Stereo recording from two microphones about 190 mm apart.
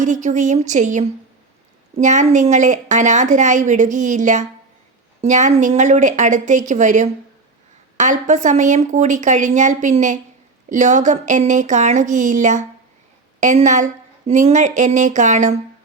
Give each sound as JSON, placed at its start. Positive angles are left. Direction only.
{"t": 0.0, "sound": "a woman's voice", "side_deg": -40}